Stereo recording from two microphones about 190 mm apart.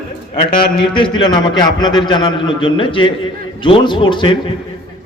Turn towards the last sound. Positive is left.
turn(degrees=25)  # may be behind; listen again after turning